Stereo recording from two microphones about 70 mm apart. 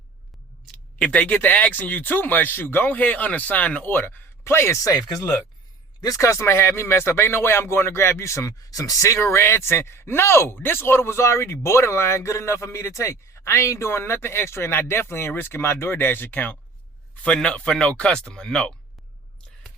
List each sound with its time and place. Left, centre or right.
0.9 s speech: centre
3.9 s speech: left
6.4 s speech: left
9.1 s speech: left
17.2 s speech: centre